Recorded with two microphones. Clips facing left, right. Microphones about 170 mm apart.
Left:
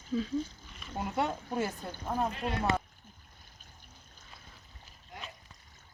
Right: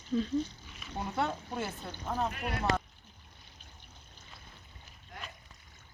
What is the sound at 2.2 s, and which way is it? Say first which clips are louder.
Speech: left 2 dB; 25° left (ahead or behind).